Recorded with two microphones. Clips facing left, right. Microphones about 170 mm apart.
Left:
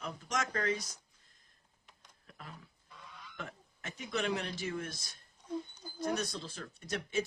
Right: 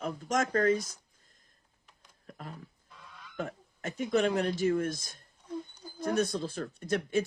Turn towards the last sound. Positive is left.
turn(degrees=-50)  # may be behind; listen again after turning